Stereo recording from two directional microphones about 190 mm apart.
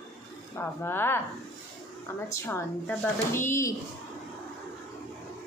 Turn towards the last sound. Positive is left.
turn(degrees=15)  # may be behind; listen again after turning